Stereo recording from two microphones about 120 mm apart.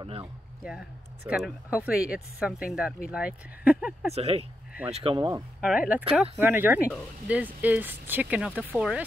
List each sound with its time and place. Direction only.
1.3 s speech: 5° right (ahead or behind)
4.1 s speech: 60° right (ahead or behind)
5.6 s speech: 10° right (ahead or behind)